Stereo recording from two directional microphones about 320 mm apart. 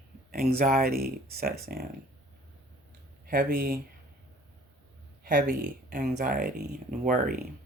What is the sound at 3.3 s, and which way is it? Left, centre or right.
Speech, right.